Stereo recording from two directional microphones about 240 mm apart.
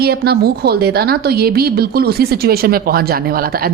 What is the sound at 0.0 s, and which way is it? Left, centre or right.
A woman's voice, right.